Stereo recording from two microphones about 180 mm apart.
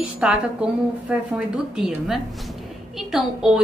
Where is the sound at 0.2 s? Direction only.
5° right (ahead or behind).